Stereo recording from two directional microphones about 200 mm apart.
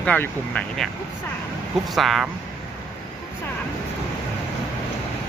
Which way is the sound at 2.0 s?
Centre (ahead or behind).